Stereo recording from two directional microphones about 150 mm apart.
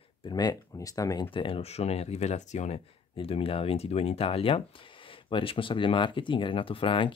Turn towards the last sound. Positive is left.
turn(degrees=35)  # may be behind; listen again after turning